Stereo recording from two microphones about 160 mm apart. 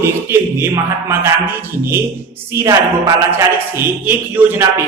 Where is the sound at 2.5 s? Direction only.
15° right (ahead or behind).